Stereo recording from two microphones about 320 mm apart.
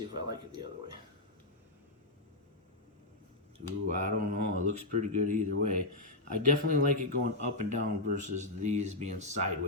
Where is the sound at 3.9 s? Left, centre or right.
Right.